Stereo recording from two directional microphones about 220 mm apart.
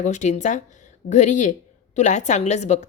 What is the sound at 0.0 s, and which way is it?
A woman's voice, 35° left (ahead or behind).